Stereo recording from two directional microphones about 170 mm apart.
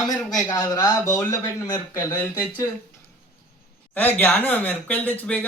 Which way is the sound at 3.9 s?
10° left (ahead or behind).